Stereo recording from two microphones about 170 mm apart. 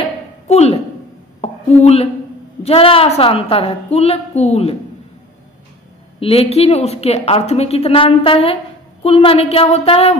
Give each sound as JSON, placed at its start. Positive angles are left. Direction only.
{"t": 0.5, "sound": "speech", "side_deg": 40}
{"t": 1.4, "sound": "a sound", "side_deg": 40}
{"t": 2.6, "sound": "a woman's voice", "side_deg": 35}
{"t": 6.1, "sound": "a woman's voice", "side_deg": 35}